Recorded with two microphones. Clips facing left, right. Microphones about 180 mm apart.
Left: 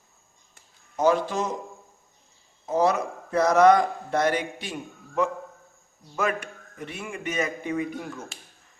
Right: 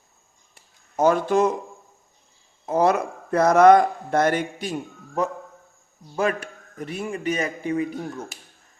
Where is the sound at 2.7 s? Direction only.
55° right (ahead or behind).